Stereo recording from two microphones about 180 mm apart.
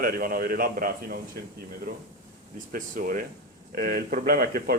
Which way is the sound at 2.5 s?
50° right (ahead or behind).